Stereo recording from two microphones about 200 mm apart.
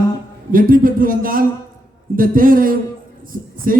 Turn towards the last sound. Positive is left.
turn(degrees=-45)  # may be behind; listen again after turning